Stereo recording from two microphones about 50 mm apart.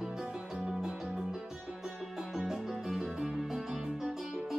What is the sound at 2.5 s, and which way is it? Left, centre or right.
Music, centre.